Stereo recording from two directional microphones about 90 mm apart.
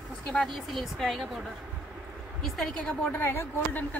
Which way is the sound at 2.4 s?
Centre (ahead or behind).